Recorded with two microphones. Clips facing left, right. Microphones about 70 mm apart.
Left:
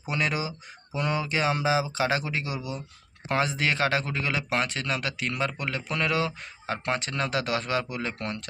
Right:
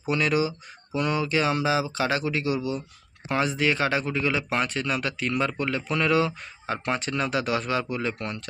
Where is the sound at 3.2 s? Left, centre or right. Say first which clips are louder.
Right 2 dB; left.